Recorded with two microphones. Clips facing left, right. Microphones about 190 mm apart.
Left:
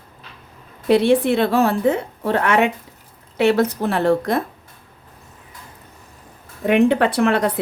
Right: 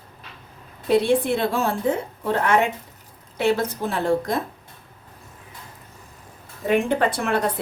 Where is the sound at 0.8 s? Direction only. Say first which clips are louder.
Left 4 dB; 65° left (ahead or behind).